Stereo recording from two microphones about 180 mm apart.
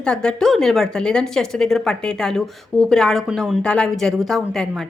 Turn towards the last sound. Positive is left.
turn(degrees=0)  # may be behind; listen again after turning